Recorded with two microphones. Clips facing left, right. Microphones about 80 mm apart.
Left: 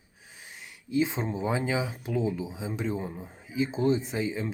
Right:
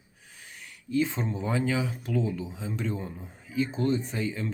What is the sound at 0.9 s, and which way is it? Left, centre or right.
Speech, centre.